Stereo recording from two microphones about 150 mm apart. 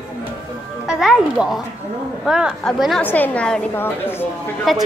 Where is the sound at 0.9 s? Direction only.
5° right (ahead or behind).